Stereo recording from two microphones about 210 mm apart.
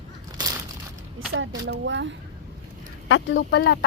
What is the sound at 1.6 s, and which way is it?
Speech, 55° right (ahead or behind).